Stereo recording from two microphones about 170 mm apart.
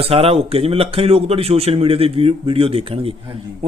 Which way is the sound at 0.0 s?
35° right (ahead or behind).